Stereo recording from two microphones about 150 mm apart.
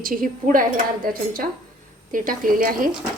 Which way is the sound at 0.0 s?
65° right (ahead or behind).